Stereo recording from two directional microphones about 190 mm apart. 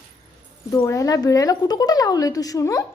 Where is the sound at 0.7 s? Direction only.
15° left (ahead or behind).